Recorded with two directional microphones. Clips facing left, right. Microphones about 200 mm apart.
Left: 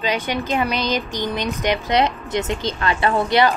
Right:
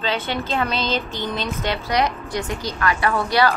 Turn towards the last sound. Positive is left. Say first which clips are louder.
# left 2 dB
turn(degrees=20)  # may be behind; listen again after turning